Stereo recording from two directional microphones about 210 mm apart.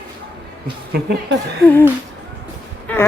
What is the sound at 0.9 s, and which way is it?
Speech, 50° right (ahead or behind).